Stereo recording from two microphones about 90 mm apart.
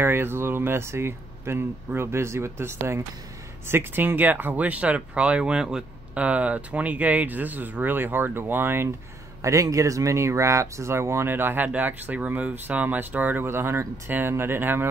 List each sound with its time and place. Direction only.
0.0 s speech: 25° right (ahead or behind)
9.4 s speech: 35° right (ahead or behind)